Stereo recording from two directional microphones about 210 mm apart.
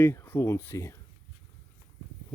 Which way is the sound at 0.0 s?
10° left (ahead or behind).